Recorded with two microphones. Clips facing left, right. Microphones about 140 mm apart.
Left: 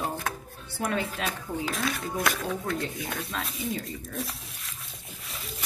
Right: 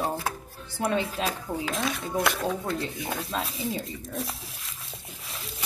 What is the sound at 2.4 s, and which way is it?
Speech, 30° right (ahead or behind).